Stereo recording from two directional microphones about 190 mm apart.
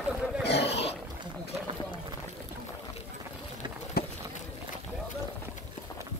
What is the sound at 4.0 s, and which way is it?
Run, 55° left (ahead or behind).